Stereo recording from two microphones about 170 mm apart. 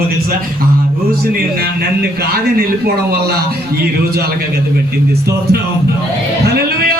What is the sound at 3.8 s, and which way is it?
Speech, 70° right (ahead or behind).